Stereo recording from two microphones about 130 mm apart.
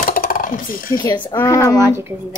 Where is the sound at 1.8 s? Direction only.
20° right (ahead or behind).